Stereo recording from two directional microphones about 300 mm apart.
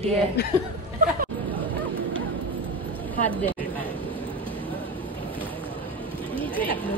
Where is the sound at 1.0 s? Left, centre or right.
Right.